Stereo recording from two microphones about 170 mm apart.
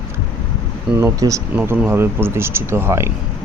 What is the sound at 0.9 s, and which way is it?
Speech, 15° right (ahead or behind).